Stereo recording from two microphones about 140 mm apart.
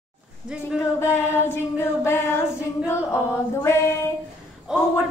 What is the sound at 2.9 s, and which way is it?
Music, 20° left (ahead or behind).